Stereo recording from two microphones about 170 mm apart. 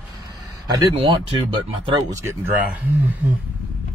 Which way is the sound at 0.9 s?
35° right (ahead or behind).